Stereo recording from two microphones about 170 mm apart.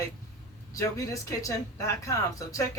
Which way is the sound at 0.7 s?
20° left (ahead or behind).